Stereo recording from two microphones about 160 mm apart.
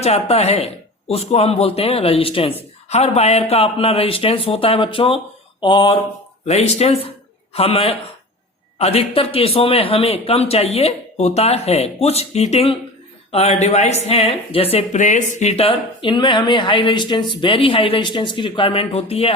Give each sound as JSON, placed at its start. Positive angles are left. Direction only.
{"t": 0.0, "sound": "speech", "side_deg": 40}
{"t": 6.4, "sound": "speech", "side_deg": 40}